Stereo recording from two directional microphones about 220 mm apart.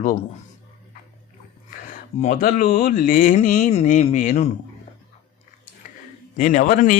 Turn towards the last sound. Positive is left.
turn(degrees=35)  # may be behind; listen again after turning